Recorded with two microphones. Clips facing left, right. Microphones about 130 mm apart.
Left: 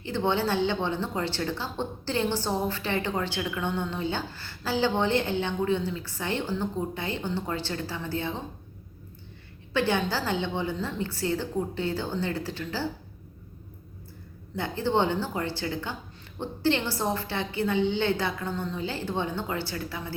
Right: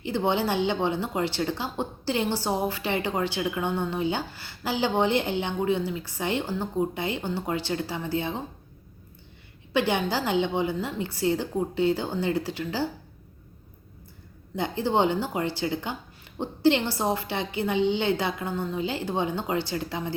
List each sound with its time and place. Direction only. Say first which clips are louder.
0.0 s a woman's voice: right 1 dB; 15° right (ahead or behind)
9.7 s a woman's voice: right 1 dB; 15° right (ahead or behind)
14.5 s a woman's voice: right 1 dB; 15° right (ahead or behind)